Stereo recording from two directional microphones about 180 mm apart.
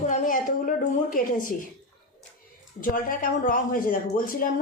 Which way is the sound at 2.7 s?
50° left (ahead or behind).